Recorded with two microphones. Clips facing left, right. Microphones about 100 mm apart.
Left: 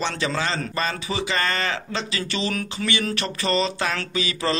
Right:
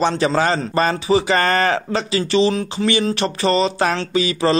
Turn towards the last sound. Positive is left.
turn(degrees=-35)  # may be behind; listen again after turning